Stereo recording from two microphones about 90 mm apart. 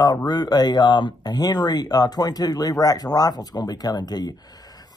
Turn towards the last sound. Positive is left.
turn(degrees=50)  # may be behind; listen again after turning